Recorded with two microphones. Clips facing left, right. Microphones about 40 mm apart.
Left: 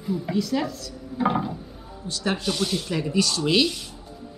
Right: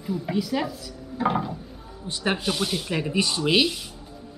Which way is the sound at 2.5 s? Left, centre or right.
Centre.